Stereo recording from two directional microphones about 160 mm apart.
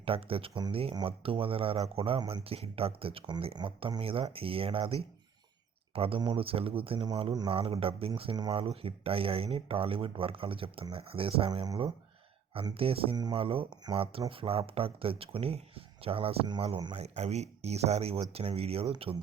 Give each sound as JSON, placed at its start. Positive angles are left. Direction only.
{"t": 0.0, "sound": "speech", "side_deg": -35}